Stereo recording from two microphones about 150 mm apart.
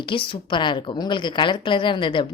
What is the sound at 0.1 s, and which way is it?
Speech, 35° left (ahead or behind).